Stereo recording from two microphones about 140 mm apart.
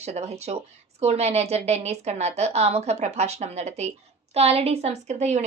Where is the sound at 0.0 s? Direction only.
50° right (ahead or behind).